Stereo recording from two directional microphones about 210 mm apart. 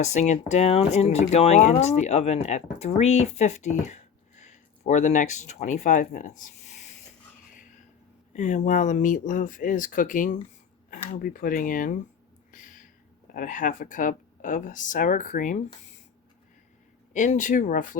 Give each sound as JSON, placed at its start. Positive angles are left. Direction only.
{"t": 0.0, "sound": "speech", "side_deg": 35}
{"t": 8.3, "sound": "speech", "side_deg": 35}
{"t": 12.5, "sound": "a sound", "side_deg": 40}
{"t": 13.3, "sound": "speech", "side_deg": 40}
{"t": 17.2, "sound": "speech", "side_deg": 35}